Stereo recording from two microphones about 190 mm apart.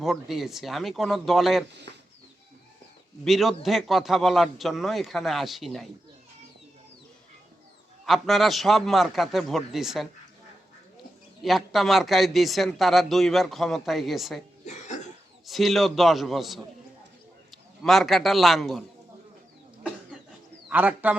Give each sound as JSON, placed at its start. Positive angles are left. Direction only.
{"t": 0.0, "sound": "a man's voice", "side_deg": 0}
{"t": 3.2, "sound": "a man's voice", "side_deg": 0}
{"t": 8.0, "sound": "a man's voice", "side_deg": 0}
{"t": 11.4, "sound": "a man's voice", "side_deg": 0}
{"t": 14.6, "sound": "cough", "side_deg": 40}
{"t": 15.4, "sound": "a man's voice", "side_deg": 0}
{"t": 20.7, "sound": "speech", "side_deg": -10}